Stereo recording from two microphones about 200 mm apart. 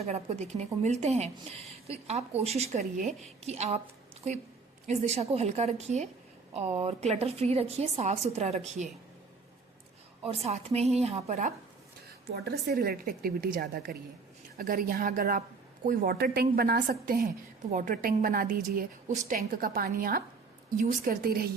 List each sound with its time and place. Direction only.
0.0 s a woman's voice: 35° right (ahead or behind)
4.9 s a woman's voice: 35° right (ahead or behind)
10.2 s a woman's voice: 30° right (ahead or behind)
12.3 s speech: 50° right (ahead or behind)